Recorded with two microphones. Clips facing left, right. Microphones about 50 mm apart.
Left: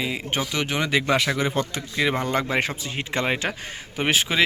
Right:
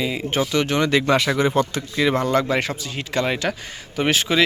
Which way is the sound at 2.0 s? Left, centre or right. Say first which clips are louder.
Right 4 dB; centre.